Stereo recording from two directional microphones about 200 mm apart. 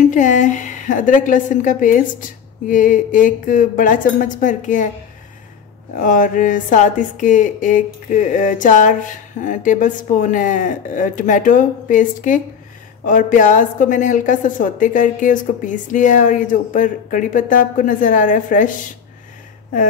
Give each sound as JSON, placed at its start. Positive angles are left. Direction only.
{"t": 0.0, "sound": "speech", "side_deg": 40}
{"t": 5.9, "sound": "speech", "side_deg": 40}